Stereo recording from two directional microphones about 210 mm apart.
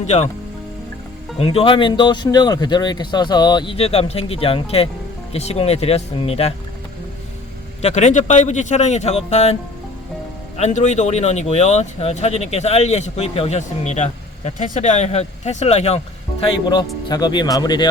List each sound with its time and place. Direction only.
0.0 s speech: 35° left (ahead or behind)
1.4 s speech: 30° left (ahead or behind)
7.8 s speech: 35° left (ahead or behind)
10.6 s speech: 35° left (ahead or behind)